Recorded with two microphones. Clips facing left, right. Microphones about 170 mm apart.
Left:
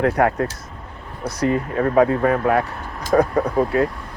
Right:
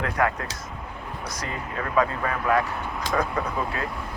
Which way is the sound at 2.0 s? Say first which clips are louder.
Left 8 dB; 50° left (ahead or behind).